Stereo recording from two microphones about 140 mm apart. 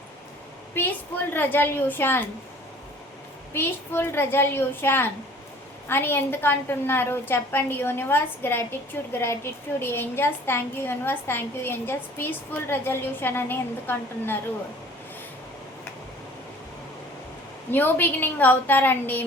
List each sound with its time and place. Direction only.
0.7 s a woman's voice: 15° left (ahead or behind)
3.5 s a woman's voice: 15° left (ahead or behind)
17.7 s a woman's voice: 15° left (ahead or behind)